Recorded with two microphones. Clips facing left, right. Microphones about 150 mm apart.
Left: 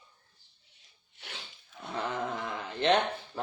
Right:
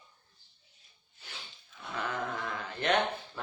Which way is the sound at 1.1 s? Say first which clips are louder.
Left 4 dB; 85° left.